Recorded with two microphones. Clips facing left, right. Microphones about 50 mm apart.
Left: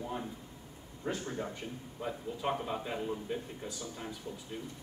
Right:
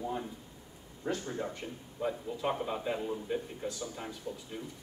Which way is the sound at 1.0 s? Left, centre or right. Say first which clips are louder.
Right 2 dB; left.